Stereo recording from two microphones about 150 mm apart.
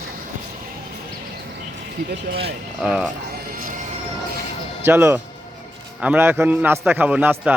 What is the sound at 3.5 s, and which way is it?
Music, 65° right (ahead or behind).